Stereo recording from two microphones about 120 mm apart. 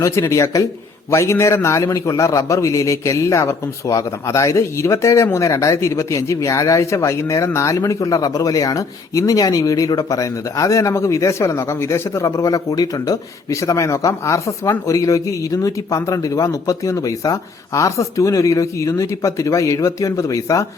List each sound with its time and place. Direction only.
0.0 s a man's voice: 25° left (ahead or behind)